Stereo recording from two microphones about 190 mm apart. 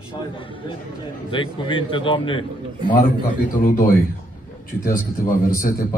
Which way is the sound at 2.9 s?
45° left (ahead or behind).